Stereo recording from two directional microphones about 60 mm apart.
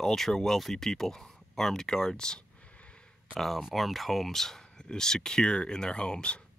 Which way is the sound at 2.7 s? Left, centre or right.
Centre.